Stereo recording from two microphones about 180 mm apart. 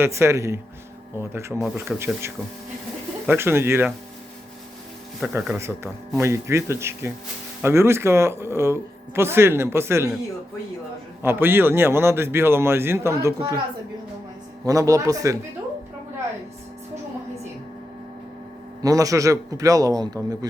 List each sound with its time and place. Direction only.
0.0 s speech: 15° right (ahead or behind)
5.2 s speech: 5° right (ahead or behind)
11.2 s speech: 10° right (ahead or behind)
14.6 s a man's voice: 20° right (ahead or behind)
18.8 s a man's voice: 20° right (ahead or behind)